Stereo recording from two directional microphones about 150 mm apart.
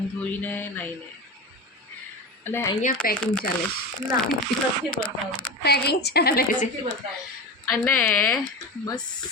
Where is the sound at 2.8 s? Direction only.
65° left (ahead or behind).